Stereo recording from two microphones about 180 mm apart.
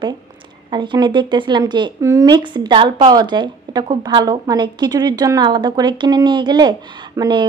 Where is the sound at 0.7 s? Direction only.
25° right (ahead or behind).